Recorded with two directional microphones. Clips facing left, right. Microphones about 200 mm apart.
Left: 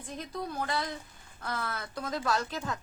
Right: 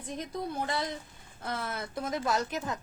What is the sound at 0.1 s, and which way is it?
A woman's voice, 20° right (ahead or behind).